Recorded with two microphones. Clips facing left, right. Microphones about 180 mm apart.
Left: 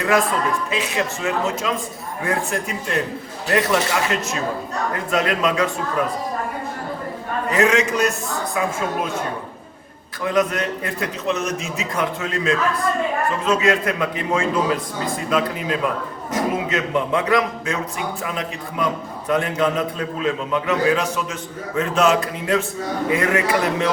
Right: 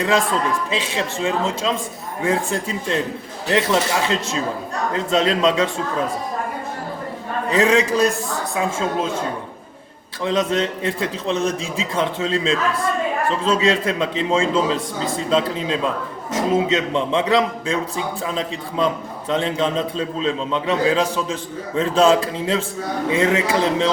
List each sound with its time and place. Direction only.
0.7 s a man's voice: 30° right (ahead or behind)
7.5 s a man's voice: 30° right (ahead or behind)
10.2 s a man's voice: 25° right (ahead or behind)